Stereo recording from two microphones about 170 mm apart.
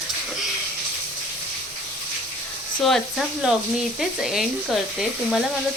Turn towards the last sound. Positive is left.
turn(degrees=0)  # may be behind; listen again after turning